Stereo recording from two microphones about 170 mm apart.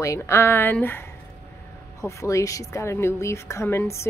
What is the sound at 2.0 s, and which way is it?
Speech, 20° left (ahead or behind).